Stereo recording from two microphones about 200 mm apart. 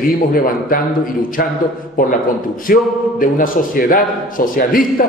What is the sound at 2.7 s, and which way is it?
A man's voice, 45° left (ahead or behind).